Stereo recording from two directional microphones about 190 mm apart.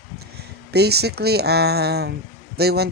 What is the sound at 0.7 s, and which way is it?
Speech, 60° right (ahead or behind).